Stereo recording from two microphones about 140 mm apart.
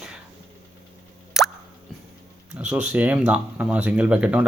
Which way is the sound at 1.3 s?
5° right (ahead or behind).